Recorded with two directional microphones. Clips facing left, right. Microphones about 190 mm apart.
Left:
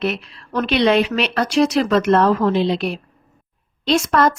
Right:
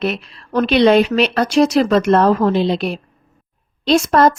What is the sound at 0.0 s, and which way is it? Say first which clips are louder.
Speech: right 2 dB; 35° right (ahead or behind).